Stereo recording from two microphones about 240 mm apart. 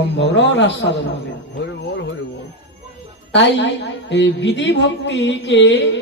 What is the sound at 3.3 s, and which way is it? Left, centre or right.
A woman's voice, left.